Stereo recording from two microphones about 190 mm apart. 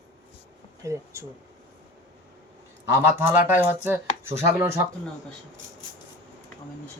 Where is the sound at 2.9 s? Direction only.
10° right (ahead or behind).